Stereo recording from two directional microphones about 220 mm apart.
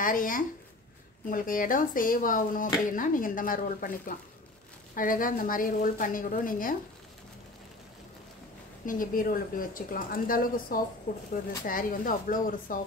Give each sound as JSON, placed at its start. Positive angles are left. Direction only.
{"t": 0.0, "sound": "speech", "side_deg": 40}
{"t": 8.8, "sound": "speech", "side_deg": 40}